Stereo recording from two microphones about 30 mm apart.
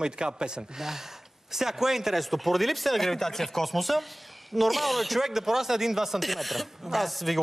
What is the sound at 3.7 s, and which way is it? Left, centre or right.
Speech, centre.